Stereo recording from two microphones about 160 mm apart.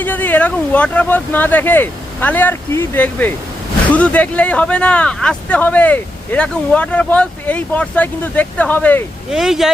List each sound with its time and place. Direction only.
0.0 s speech: 10° left (ahead or behind)
9.3 s speech: 5° right (ahead or behind)